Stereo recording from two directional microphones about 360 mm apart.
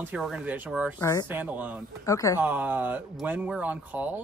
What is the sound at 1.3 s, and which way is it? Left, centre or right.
Speech, centre.